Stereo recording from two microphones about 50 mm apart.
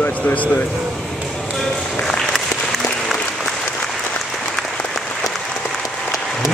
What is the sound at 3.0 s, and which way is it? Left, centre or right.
Applause, centre.